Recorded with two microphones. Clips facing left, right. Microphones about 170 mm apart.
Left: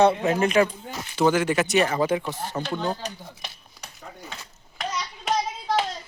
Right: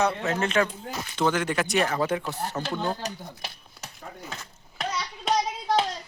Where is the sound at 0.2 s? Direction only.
15° left (ahead or behind).